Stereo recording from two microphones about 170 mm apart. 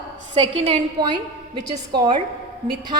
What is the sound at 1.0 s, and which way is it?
A woman's voice, 25° right (ahead or behind).